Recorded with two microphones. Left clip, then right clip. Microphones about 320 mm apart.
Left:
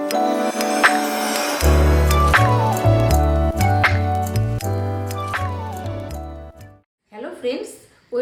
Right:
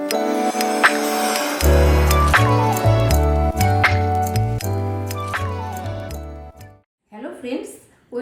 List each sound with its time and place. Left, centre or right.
0.0 s music: centre